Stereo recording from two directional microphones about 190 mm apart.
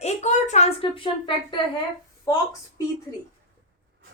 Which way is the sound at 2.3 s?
15° left (ahead or behind).